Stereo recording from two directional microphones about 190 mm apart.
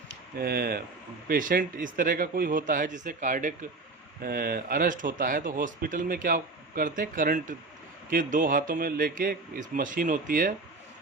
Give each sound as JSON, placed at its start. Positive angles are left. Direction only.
{"t": 0.3, "sound": "speech", "side_deg": -50}